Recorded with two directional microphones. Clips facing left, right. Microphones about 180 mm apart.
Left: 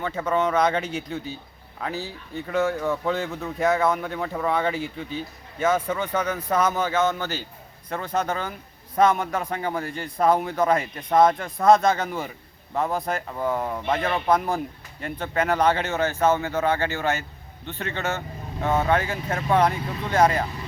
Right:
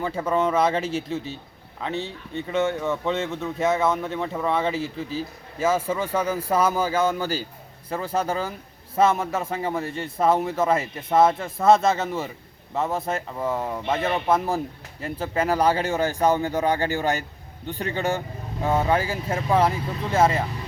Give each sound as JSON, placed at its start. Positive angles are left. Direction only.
{"t": 0.0, "sound": "speech", "side_deg": -10}
{"t": 0.7, "sound": "speech", "side_deg": -30}
{"t": 0.9, "sound": "speech", "side_deg": 0}
{"t": 5.0, "sound": "a man's voice", "side_deg": -30}
{"t": 5.6, "sound": "speech", "side_deg": -5}